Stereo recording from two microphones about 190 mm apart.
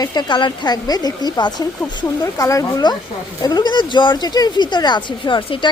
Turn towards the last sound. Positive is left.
turn(degrees=25)  # may be behind; listen again after turning